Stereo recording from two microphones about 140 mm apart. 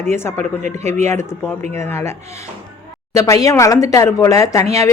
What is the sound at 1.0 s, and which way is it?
A man's voice, 20° left (ahead or behind).